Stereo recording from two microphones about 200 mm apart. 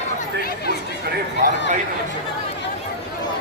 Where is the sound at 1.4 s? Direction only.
45° right (ahead or behind).